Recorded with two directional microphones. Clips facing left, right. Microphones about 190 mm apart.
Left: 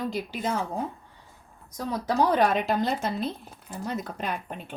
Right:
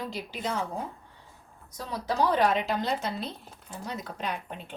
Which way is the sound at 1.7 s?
50° left (ahead or behind).